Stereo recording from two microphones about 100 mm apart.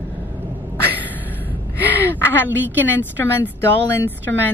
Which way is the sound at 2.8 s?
20° left (ahead or behind).